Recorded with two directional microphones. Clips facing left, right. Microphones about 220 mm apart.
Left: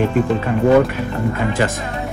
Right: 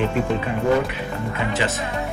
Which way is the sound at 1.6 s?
50° left (ahead or behind).